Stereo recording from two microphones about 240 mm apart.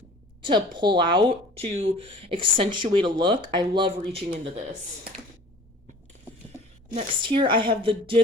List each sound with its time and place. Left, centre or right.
0.4 s speech: centre
6.9 s speech: right